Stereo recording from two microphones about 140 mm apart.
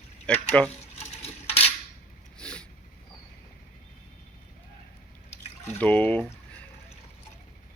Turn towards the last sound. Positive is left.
turn(degrees=15)  # may be behind; listen again after turning